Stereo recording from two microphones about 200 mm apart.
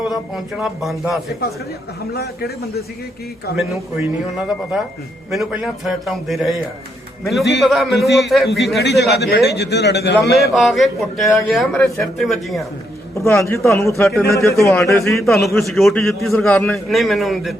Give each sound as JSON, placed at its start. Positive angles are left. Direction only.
{"t": 0.1, "sound": "a man's voice", "side_deg": 0}
{"t": 2.1, "sound": "a man's voice", "side_deg": 50}
{"t": 4.0, "sound": "a man's voice", "side_deg": -5}
{"t": 7.6, "sound": "a man's voice", "side_deg": 0}
{"t": 8.8, "sound": "a man's voice", "side_deg": 55}
{"t": 10.5, "sound": "a man's voice", "side_deg": 0}
{"t": 13.1, "sound": "a man's voice", "side_deg": 15}
{"t": 14.0, "sound": "a man's voice", "side_deg": 0}
{"t": 14.3, "sound": "a man's voice", "side_deg": 15}
{"t": 14.8, "sound": "a man's voice", "side_deg": 0}